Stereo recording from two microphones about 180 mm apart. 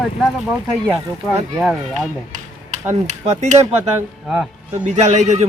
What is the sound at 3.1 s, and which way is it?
Speech, 40° right (ahead or behind).